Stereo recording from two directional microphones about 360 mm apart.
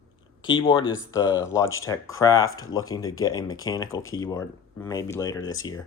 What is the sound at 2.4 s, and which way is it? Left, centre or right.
Speech, left.